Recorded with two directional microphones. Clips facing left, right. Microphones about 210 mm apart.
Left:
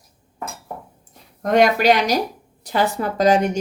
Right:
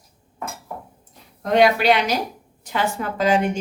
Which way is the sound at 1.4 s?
45° left (ahead or behind).